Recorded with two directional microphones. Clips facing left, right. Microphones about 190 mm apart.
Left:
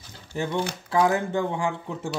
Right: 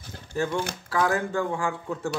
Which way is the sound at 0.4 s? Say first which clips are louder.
Even; 20° left (ahead or behind).